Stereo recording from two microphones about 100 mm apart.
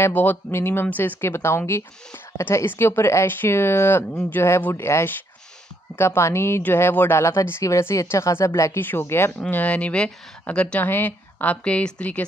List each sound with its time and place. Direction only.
0.0 s speech: 20° left (ahead or behind)